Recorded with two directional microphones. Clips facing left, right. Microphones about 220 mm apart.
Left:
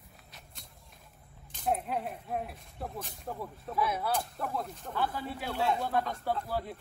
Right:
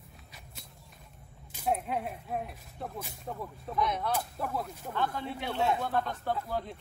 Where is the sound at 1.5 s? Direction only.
5° right (ahead or behind).